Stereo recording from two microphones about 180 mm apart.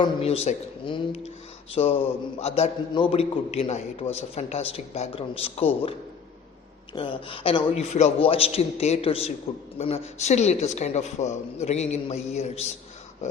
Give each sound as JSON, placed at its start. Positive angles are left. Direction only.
{"t": 0.0, "sound": "a man's voice", "side_deg": 35}
{"t": 6.9, "sound": "a man's voice", "side_deg": 30}